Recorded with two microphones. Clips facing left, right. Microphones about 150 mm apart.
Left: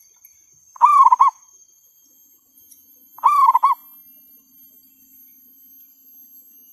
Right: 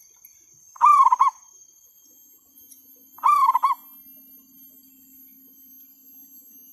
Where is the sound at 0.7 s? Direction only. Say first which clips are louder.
Left 4 dB; 35° left (ahead or behind).